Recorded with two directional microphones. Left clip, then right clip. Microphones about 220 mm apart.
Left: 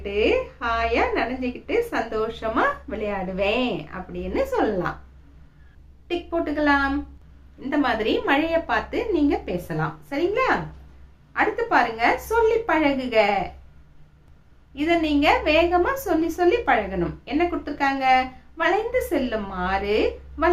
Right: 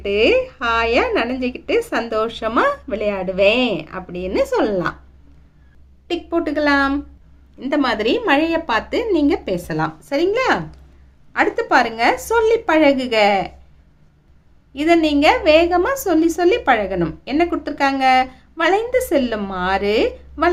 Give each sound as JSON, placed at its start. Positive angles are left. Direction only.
{"t": 0.0, "sound": "a woman's voice", "side_deg": -50}
{"t": 6.1, "sound": "a woman's voice", "side_deg": -50}
{"t": 14.7, "sound": "a woman's voice", "side_deg": -50}